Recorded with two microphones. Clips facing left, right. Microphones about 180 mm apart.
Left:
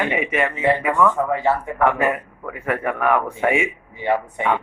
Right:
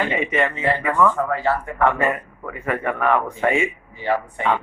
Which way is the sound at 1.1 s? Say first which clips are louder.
Left 2 dB; 20° left (ahead or behind).